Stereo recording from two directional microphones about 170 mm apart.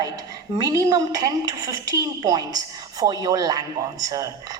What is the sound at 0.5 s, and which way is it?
A woman's voice, 20° right (ahead or behind).